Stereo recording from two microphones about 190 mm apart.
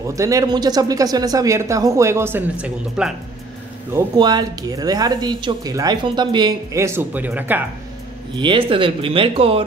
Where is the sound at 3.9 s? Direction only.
20° right (ahead or behind).